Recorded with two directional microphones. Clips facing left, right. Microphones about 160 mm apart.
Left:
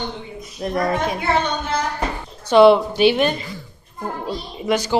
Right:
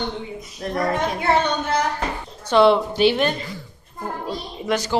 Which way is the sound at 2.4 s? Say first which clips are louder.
Left 4 dB; 10° left (ahead or behind).